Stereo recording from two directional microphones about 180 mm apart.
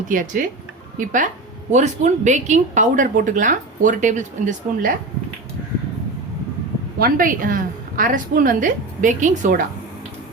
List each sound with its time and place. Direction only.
0.1 s a woman's voice: 50° right (ahead or behind)
7.0 s a woman's voice: 50° right (ahead or behind)